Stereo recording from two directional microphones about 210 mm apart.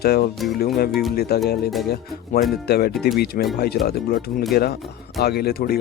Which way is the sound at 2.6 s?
50° left (ahead or behind).